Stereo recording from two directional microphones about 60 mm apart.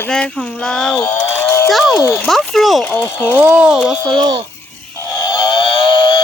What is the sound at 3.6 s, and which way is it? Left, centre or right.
Speech, centre.